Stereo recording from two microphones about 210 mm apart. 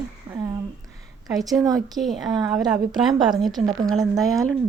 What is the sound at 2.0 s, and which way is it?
Speech, centre (ahead or behind).